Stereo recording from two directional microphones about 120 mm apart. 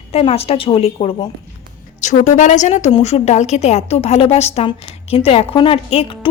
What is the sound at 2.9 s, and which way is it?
A woman's voice, 60° left (ahead or behind).